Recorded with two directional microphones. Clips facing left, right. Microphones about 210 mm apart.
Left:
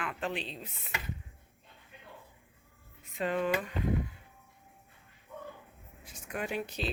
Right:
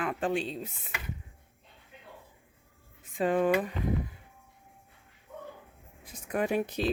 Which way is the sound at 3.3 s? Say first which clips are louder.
Right 5 dB; 50° right (ahead or behind).